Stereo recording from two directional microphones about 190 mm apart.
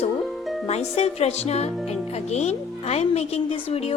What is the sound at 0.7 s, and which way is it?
Speech, 35° left (ahead or behind).